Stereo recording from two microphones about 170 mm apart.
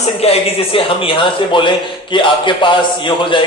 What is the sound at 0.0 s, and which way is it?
Speech, 35° left (ahead or behind).